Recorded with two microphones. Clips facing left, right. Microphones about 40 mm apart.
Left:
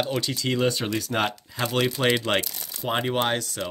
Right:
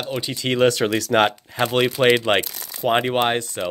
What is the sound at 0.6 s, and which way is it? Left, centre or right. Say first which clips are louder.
Speech: right 11 dB; right.